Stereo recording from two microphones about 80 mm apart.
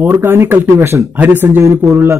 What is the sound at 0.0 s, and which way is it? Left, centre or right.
Speech, right.